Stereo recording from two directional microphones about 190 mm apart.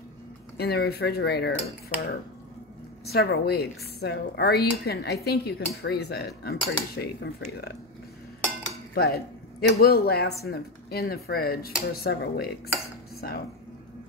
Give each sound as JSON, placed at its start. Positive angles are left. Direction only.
{"t": 0.6, "sound": "a woman's voice", "side_deg": 55}
{"t": 8.9, "sound": "a woman's voice", "side_deg": 55}